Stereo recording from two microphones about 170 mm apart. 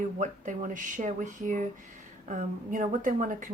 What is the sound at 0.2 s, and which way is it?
A woman's voice, 45° right (ahead or behind).